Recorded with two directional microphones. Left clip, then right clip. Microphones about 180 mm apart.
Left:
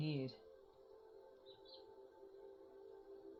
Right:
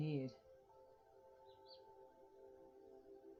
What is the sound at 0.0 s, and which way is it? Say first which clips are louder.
Music: even; 35° left (ahead or behind).